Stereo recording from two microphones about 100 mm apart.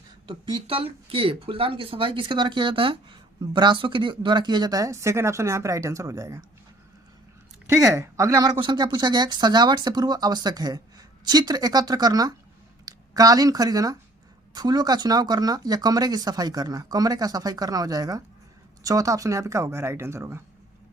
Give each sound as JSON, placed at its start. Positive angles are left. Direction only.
{"t": 0.3, "sound": "speech", "side_deg": -50}
{"t": 7.9, "sound": "speech", "side_deg": -30}
{"t": 8.6, "sound": "speech", "side_deg": -45}